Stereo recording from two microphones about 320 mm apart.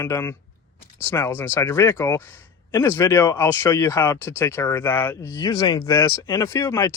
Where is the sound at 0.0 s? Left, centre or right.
Centre.